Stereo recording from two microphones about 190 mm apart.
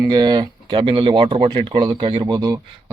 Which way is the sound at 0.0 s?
20° right (ahead or behind).